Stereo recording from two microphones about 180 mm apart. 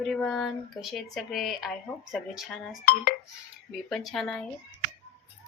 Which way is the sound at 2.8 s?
55° left (ahead or behind).